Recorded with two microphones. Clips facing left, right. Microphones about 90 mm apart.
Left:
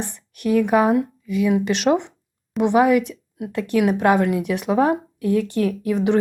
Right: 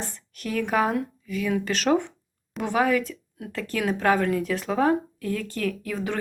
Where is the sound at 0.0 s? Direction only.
20° left (ahead or behind).